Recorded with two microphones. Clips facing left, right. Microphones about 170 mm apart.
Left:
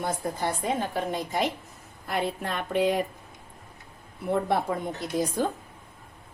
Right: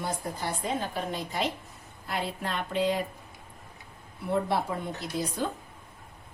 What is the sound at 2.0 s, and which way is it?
Speech, 55° left (ahead or behind).